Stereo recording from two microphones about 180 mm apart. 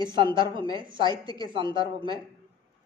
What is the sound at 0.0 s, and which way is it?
A man's voice, 25° right (ahead or behind).